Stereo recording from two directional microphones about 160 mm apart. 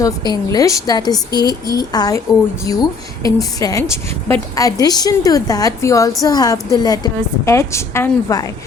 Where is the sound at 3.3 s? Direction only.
20° left (ahead or behind).